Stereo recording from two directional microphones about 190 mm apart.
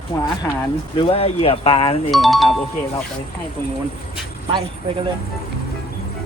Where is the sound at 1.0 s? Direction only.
30° left (ahead or behind).